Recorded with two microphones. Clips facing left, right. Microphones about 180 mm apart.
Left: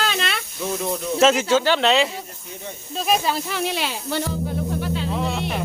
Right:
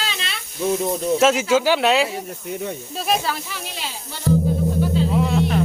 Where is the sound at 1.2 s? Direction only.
5° right (ahead or behind).